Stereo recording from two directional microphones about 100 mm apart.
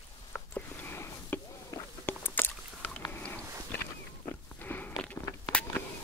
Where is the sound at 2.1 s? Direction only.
20° left (ahead or behind).